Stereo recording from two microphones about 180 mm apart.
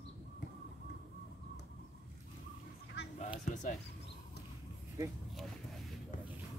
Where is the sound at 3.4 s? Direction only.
45° left (ahead or behind).